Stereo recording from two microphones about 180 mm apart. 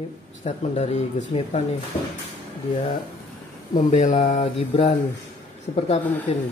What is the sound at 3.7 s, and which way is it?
Speech, 45° left (ahead or behind).